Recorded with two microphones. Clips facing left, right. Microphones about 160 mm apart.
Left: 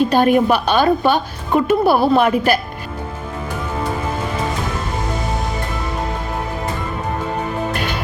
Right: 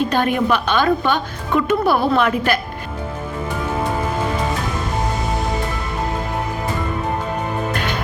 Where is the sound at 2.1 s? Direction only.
15° left (ahead or behind).